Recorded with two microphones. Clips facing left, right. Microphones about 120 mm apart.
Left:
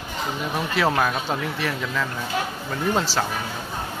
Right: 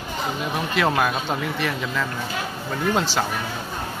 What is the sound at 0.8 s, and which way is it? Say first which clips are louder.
Speech: even; centre (ahead or behind).